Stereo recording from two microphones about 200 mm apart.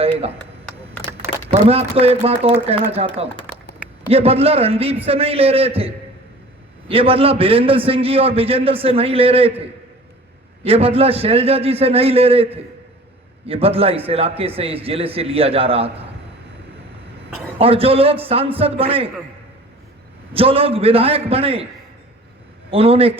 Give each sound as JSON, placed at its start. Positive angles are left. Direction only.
{"t": 0.0, "sound": "a sound", "side_deg": -30}
{"t": 1.5, "sound": "a man's voice", "side_deg": -30}
{"t": 10.6, "sound": "a man's voice", "side_deg": -30}
{"t": 17.6, "sound": "a man's voice", "side_deg": -30}
{"t": 20.3, "sound": "a man's voice", "side_deg": -30}
{"t": 22.7, "sound": "a man's voice", "side_deg": -30}